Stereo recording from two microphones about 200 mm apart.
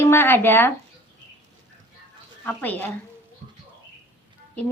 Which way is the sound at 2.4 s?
10° left (ahead or behind).